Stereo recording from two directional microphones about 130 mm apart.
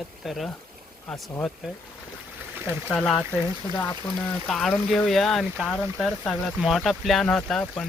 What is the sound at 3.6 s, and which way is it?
Speech, 25° left (ahead or behind).